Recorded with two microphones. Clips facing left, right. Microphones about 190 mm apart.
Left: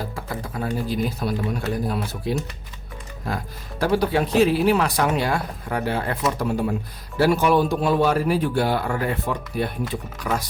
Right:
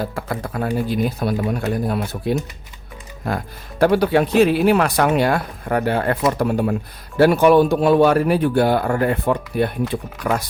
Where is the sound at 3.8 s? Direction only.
65° right (ahead or behind).